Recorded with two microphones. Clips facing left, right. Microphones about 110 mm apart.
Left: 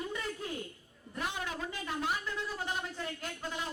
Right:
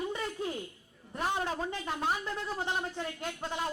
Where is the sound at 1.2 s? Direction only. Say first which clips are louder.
Right 5 dB; 35° right (ahead or behind).